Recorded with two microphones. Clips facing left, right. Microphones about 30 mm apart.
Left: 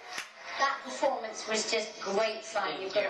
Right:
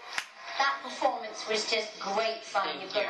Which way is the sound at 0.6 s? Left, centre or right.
Right.